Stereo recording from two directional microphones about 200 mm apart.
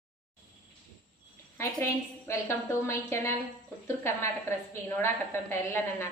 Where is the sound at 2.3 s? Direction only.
15° left (ahead or behind).